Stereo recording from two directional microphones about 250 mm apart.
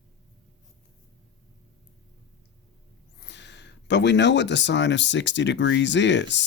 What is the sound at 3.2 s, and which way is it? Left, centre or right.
Speech, left.